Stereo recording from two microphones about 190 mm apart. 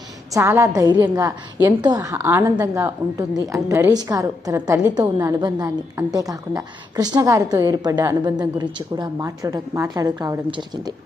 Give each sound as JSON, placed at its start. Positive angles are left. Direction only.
{"t": 0.3, "sound": "a woman's voice", "side_deg": -15}